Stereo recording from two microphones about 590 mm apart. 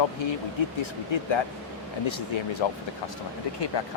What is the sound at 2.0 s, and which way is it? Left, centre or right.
Speech, left.